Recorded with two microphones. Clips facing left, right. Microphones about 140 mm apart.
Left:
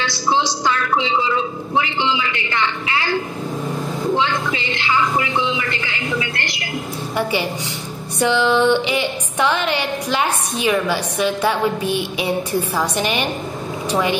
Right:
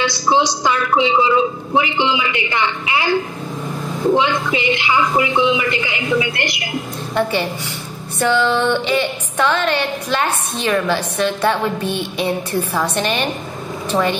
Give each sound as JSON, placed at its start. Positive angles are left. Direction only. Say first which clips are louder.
{"t": 0.0, "sound": "speech", "louder": "right 3 dB", "side_deg": -15}
{"t": 4.2, "sound": "speech", "louder": "right 3 dB", "side_deg": -15}
{"t": 7.2, "sound": "music", "louder": "right 2 dB", "side_deg": 10}
{"t": 13.8, "sound": "speech", "louder": "right 2 dB", "side_deg": 10}